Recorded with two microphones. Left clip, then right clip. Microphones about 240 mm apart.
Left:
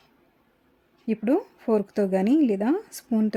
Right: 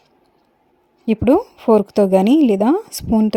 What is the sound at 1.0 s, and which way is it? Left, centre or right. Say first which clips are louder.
A woman's voice: right 10 dB; right.